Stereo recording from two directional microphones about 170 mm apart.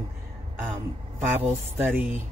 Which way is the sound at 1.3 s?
10° right (ahead or behind).